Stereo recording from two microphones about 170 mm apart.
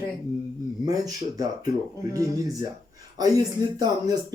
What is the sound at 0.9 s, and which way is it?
Speech, 20° right (ahead or behind).